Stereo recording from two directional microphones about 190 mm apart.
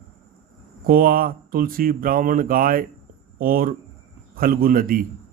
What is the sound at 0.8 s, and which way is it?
Speech, 50° right (ahead or behind).